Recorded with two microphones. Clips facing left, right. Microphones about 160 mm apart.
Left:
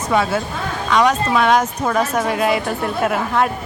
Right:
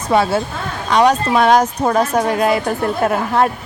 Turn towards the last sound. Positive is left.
turn(degrees=-35)  # may be behind; listen again after turning